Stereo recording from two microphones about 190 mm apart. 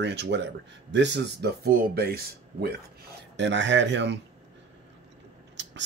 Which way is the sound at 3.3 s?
70° right (ahead or behind).